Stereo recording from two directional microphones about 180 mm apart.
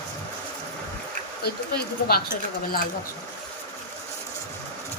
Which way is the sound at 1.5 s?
60° left (ahead or behind).